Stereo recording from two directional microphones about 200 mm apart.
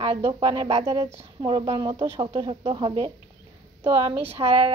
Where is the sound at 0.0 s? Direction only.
25° right (ahead or behind).